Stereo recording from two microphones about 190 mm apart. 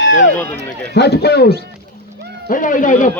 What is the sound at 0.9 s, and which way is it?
Speech, 60° left (ahead or behind).